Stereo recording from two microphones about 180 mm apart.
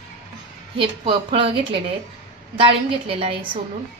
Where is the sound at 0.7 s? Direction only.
30° right (ahead or behind).